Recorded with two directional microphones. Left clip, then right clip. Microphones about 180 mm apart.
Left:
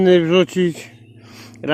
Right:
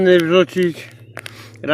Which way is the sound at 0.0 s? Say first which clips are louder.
Right 1 dB; 35° left (ahead or behind).